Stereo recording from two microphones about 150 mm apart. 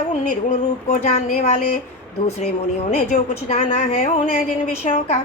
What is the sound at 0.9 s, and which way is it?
Speech, 50° left (ahead or behind).